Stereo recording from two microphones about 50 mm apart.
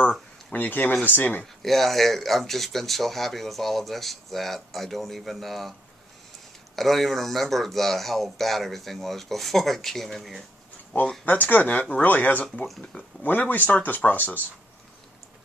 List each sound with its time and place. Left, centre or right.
0.5 s speech: left
1.4 s speech: centre
11.2 s speech: left